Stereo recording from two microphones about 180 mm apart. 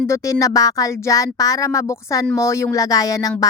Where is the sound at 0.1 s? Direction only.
20° left (ahead or behind).